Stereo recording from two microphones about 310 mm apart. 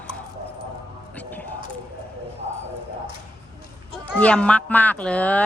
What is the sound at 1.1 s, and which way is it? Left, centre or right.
Music, centre.